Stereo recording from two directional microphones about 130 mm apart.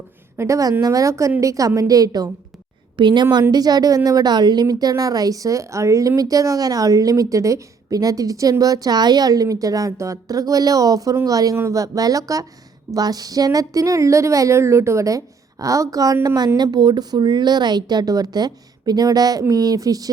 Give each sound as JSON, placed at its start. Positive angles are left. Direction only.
{"t": 0.3, "sound": "a woman's voice", "side_deg": -25}